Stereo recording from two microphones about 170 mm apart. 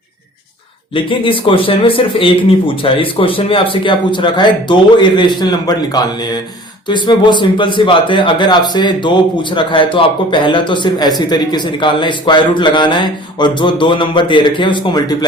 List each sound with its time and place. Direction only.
0.9 s a man's voice: 30° left (ahead or behind)